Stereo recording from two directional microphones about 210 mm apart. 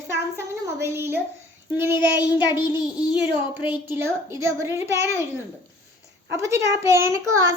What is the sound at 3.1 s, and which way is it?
Child singing, 5° right (ahead or behind).